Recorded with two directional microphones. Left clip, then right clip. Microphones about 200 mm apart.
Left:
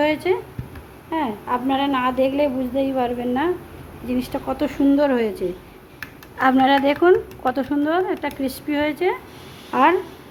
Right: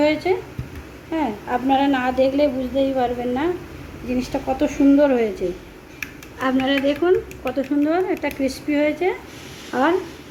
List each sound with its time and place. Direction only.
0.0 s a woman's voice: 25° left (ahead or behind)
7.9 s speech: 15° left (ahead or behind)